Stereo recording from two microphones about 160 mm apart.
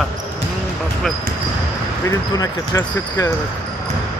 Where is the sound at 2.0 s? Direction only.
20° left (ahead or behind).